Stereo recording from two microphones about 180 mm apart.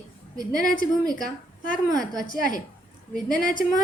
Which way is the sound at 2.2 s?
50° left (ahead or behind).